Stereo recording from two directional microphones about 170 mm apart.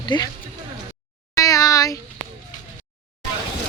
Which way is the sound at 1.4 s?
20° left (ahead or behind).